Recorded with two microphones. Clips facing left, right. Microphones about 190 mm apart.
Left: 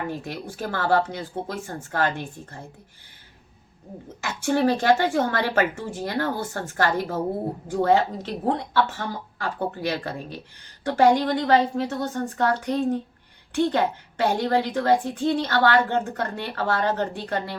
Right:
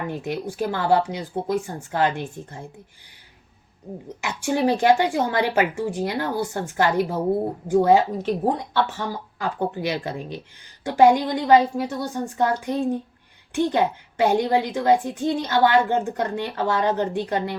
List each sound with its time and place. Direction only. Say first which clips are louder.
0.3 s a woman's voice: right 5 dB; 15° right (ahead or behind)
4.2 s a woman's voice: even; 15° right (ahead or behind)